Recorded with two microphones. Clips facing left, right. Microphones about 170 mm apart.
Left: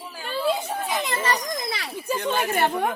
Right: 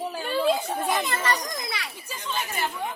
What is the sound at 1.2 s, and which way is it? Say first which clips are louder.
Speech: left 2 dB; 30° left (ahead or behind).